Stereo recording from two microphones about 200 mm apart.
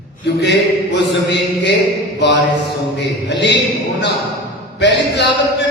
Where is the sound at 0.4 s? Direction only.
60° left (ahead or behind).